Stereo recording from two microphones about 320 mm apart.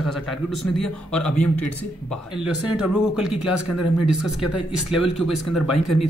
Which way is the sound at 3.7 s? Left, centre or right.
Left.